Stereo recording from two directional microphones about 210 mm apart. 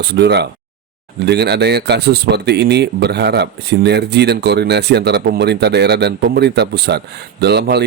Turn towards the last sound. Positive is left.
turn(degrees=-50)  # may be behind; listen again after turning